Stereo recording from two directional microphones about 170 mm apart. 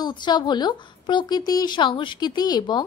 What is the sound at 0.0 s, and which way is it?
A woman's voice, 25° left (ahead or behind).